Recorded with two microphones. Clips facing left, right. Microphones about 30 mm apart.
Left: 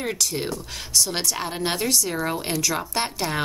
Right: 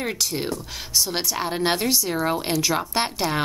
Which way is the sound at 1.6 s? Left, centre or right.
Centre.